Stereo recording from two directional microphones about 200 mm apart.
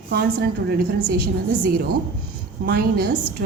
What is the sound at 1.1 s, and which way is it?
A woman's voice, 50° right (ahead or behind).